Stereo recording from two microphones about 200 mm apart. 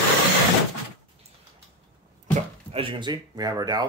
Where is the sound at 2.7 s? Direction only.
25° right (ahead or behind).